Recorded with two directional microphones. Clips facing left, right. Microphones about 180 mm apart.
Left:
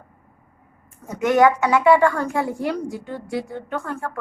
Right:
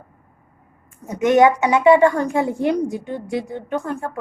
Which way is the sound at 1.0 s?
20° right (ahead or behind).